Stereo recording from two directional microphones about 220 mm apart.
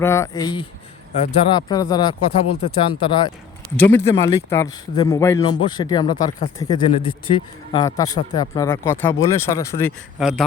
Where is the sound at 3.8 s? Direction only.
10° left (ahead or behind).